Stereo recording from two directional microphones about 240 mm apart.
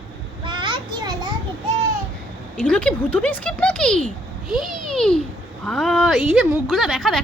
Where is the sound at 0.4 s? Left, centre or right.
Centre.